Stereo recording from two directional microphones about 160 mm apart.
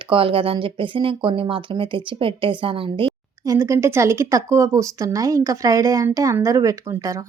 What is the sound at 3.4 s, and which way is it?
Speech, 20° right (ahead or behind).